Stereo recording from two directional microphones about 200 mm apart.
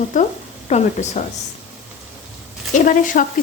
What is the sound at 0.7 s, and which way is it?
Sizzle, 35° left (ahead or behind).